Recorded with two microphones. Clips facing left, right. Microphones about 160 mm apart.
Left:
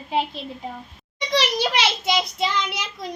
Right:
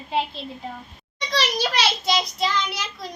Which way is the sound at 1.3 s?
20° left (ahead or behind).